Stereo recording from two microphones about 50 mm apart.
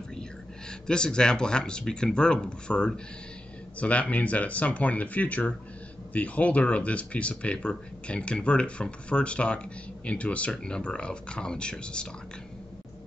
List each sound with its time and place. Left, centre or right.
0.7 s speech: centre